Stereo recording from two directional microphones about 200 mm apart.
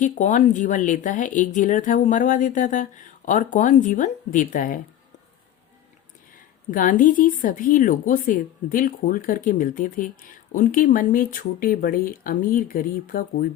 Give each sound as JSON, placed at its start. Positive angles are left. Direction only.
{"t": 0.0, "sound": "speech", "side_deg": 40}
{"t": 6.7, "sound": "a woman's voice", "side_deg": 45}